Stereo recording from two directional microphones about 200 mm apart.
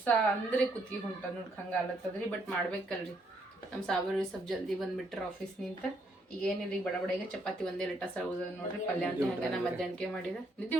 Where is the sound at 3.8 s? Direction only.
Centre (ahead or behind).